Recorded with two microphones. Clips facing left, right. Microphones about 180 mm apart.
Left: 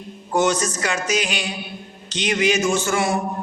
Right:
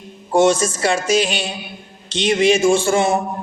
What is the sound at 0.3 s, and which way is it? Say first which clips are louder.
Music: right 5 dB; 25° right (ahead or behind).